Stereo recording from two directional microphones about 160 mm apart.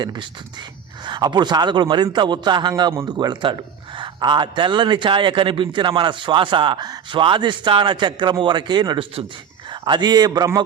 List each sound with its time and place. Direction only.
0.0 s a man's voice: 25° right (ahead or behind)